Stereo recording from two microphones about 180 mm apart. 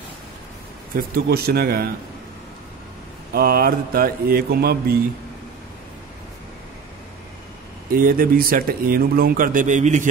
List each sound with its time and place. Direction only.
0.9 s speech: 55° right (ahead or behind)
3.3 s speech: 60° right (ahead or behind)
7.9 s speech: 50° right (ahead or behind)